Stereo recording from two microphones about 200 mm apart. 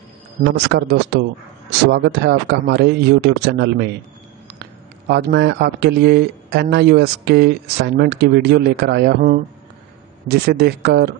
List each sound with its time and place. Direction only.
0.6 s speech: 55° right (ahead or behind)